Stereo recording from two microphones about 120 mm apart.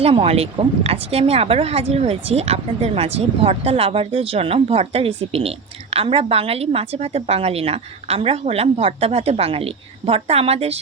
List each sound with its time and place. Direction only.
0.0 s speech: 55° right (ahead or behind)